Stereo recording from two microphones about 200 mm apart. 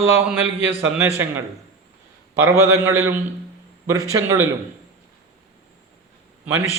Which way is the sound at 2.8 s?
10° right (ahead or behind).